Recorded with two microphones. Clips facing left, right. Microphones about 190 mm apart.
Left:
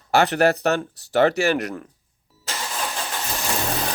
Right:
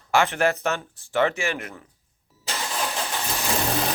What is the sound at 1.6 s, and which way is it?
Speech, 75° left (ahead or behind).